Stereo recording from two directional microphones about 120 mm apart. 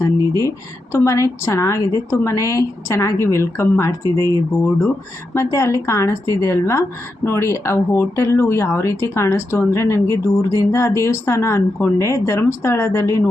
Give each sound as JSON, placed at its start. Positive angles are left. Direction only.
{"t": 0.0, "sound": "a sound", "side_deg": 25}
{"t": 0.9, "sound": "speech", "side_deg": 25}
{"t": 5.3, "sound": "speech", "side_deg": 25}